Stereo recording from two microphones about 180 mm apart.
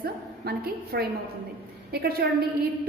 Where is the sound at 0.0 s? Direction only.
60° right (ahead or behind).